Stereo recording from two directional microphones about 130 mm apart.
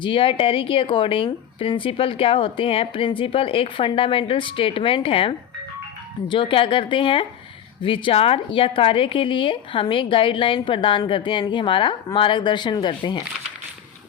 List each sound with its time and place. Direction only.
0.0 s speech: 45° left (ahead or behind)